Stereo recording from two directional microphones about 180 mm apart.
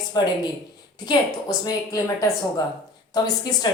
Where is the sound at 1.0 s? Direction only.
20° left (ahead or behind).